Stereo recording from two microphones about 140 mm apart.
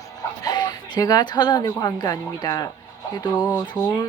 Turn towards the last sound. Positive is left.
turn(degrees=30)  # may be behind; listen again after turning